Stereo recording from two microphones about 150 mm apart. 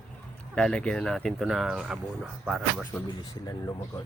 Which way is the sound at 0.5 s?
5° left (ahead or behind).